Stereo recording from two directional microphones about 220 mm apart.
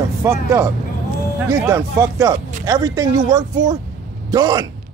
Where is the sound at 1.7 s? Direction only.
15° right (ahead or behind).